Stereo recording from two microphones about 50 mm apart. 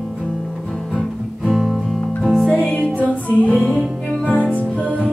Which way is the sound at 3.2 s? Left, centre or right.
Left.